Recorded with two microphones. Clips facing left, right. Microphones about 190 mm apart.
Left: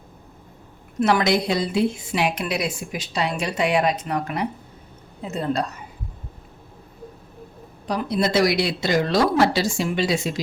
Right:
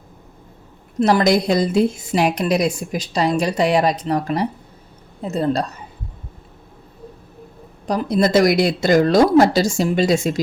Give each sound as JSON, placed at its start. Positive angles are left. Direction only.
{"t": 0.9, "sound": "a woman's voice", "side_deg": -35}
{"t": 7.9, "sound": "speech", "side_deg": -45}